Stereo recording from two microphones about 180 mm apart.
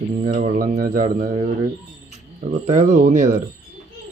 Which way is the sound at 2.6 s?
40° right (ahead or behind).